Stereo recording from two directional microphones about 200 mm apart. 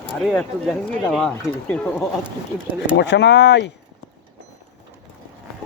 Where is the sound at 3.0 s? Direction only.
60° left (ahead or behind).